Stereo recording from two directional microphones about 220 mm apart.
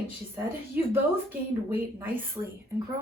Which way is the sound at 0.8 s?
10° right (ahead or behind).